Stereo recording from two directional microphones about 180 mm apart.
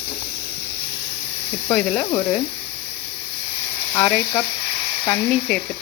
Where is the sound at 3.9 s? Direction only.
15° left (ahead or behind).